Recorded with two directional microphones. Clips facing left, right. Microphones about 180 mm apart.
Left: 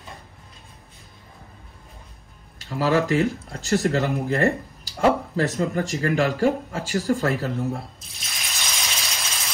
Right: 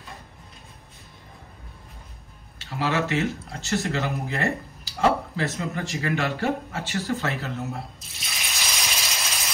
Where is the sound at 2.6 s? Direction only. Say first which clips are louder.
Left 5 dB; 40° left (ahead or behind).